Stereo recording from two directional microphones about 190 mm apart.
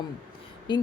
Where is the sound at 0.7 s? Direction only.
25° left (ahead or behind).